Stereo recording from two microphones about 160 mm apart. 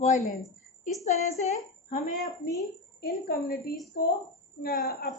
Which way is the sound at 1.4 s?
45° left (ahead or behind).